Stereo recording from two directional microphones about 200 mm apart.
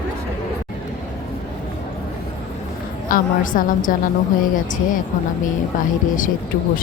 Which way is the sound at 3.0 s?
45° left (ahead or behind).